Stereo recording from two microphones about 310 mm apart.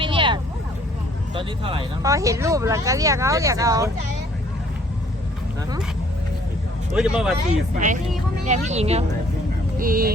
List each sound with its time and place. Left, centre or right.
0.0 s vehicle: centre
1.3 s speech: centre
6.9 s speech: centre
8.4 s speech: right